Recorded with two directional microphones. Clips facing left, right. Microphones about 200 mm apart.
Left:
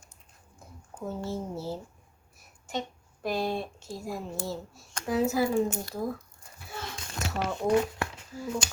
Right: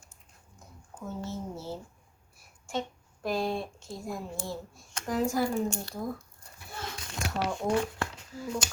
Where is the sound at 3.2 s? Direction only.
Centre (ahead or behind).